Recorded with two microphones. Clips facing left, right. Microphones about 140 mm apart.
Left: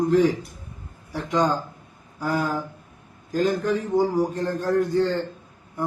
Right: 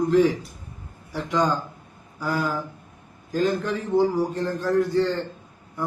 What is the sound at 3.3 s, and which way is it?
A man's voice, 40° left (ahead or behind).